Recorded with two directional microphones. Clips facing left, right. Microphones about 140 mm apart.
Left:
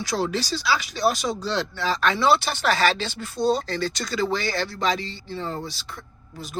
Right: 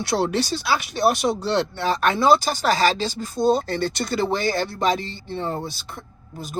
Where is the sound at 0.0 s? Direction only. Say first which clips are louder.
Right 4 dB; 65° right (ahead or behind).